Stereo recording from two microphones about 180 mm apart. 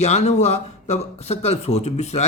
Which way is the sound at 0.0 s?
40° left (ahead or behind).